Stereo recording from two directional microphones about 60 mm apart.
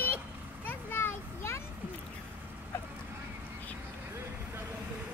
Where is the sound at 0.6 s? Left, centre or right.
Left.